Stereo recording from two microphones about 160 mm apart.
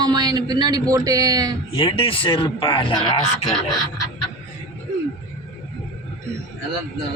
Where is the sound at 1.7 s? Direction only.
35° left (ahead or behind).